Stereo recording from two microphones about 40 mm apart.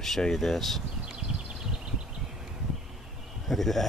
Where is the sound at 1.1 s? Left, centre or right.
Right.